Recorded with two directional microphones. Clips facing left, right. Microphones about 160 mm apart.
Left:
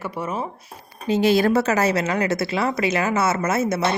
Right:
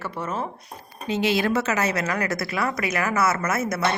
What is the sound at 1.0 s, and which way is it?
A woman's voice, 35° left (ahead or behind).